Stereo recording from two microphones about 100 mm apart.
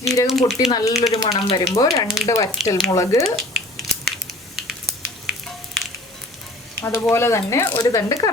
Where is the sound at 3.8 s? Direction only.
Centre (ahead or behind).